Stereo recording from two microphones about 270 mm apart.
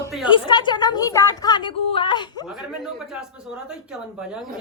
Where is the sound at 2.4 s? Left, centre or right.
Centre.